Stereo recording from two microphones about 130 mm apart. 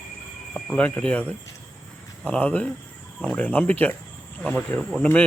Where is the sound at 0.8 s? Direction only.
10° left (ahead or behind).